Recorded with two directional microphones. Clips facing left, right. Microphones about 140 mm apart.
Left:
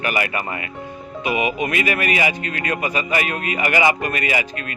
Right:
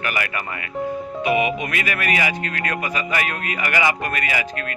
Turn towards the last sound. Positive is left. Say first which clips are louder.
# left 2 dB
turn(degrees=20)  # may be behind; listen again after turning